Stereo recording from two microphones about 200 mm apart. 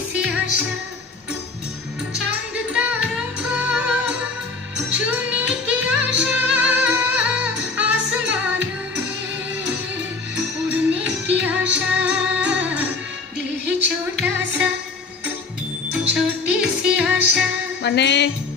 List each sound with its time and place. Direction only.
2.7 s music: 5° right (ahead or behind)
11.3 s music: 5° right (ahead or behind)
16.2 s music: 5° right (ahead or behind)
17.8 s music: 60° left (ahead or behind)